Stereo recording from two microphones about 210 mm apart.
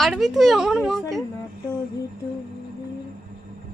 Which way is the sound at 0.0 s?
Centre (ahead or behind).